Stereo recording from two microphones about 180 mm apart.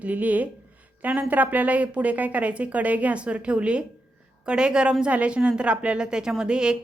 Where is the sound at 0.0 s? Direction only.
10° right (ahead or behind).